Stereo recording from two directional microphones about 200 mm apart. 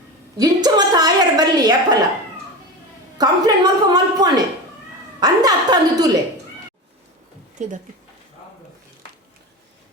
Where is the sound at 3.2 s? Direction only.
20° right (ahead or behind).